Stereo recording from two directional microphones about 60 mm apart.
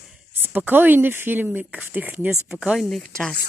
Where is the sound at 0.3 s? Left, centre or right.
Right.